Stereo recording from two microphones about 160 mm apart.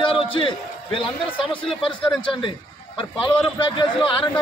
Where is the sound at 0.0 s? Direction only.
30° left (ahead or behind).